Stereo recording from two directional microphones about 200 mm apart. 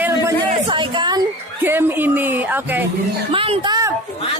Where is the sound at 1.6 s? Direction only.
10° right (ahead or behind).